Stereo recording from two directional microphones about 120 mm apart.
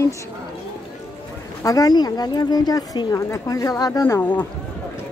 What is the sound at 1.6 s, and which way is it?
A woman's voice, 30° left (ahead or behind).